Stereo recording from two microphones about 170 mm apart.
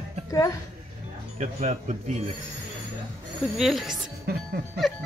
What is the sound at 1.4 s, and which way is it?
Speech, 40° right (ahead or behind).